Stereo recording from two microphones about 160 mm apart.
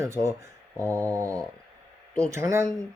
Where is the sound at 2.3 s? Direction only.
20° right (ahead or behind).